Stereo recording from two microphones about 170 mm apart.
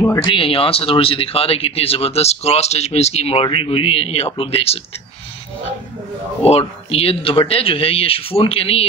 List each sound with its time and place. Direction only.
0.2 s speech: 30° left (ahead or behind)
6.4 s speech: 35° left (ahead or behind)